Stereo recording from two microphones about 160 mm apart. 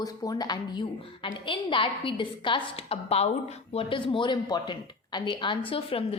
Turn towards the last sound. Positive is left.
turn(degrees=35)  # may be behind; listen again after turning